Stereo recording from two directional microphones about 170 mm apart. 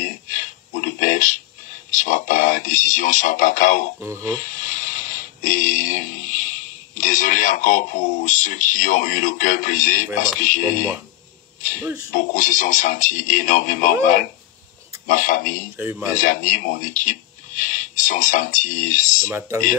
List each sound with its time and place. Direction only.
0.0 s a sound: 50° left (ahead or behind)
1.9 s speech: 50° left (ahead or behind)
4.0 s speech: 15° right (ahead or behind)
4.4 s speech: 50° left (ahead or behind)
11.8 s speech: 15° right (ahead or behind)
12.1 s speech: 50° left (ahead or behind)
15.0 s speech: 50° left (ahead or behind)
15.8 s speech: 10° right (ahead or behind)
16.2 s speech: 50° left (ahead or behind)